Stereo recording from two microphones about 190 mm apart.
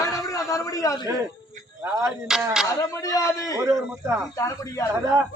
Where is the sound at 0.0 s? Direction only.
15° left (ahead or behind).